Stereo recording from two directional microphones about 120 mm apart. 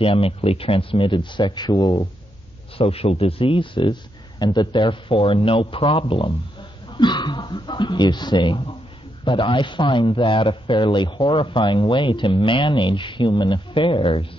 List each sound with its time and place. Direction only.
0.0 s a man's voice: 50° left (ahead or behind)
2.8 s a man's voice: 55° left (ahead or behind)